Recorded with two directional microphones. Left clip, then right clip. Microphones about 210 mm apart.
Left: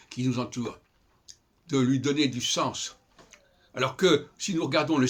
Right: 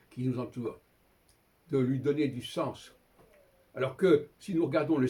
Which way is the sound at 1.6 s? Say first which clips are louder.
Left 3 dB; 15° left (ahead or behind).